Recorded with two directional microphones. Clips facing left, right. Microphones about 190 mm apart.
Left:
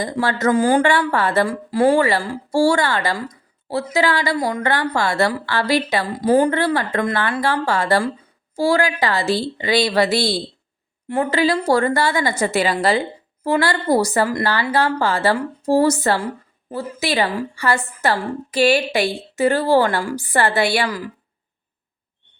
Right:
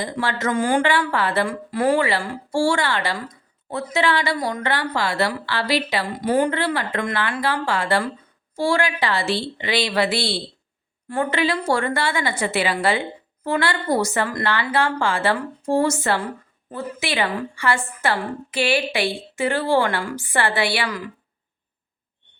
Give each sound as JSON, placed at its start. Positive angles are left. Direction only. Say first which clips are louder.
{"t": 0.0, "sound": "a woman's voice", "louder": "left 5 dB", "side_deg": 40}
{"t": 0.8, "sound": "a woman's voice", "louder": "left 3 dB", "side_deg": 45}
{"t": 1.7, "sound": "speech", "louder": "left 4 dB", "side_deg": 30}
{"t": 2.0, "sound": "a woman's voice", "louder": "left 4 dB", "side_deg": 40}
{"t": 6.1, "sound": "a woman's voice", "louder": "left 5 dB", "side_deg": 30}
{"t": 11.1, "sound": "speech", "louder": "left 3 dB", "side_deg": 25}
{"t": 11.3, "sound": "a woman's voice", "louder": "left 5 dB", "side_deg": 35}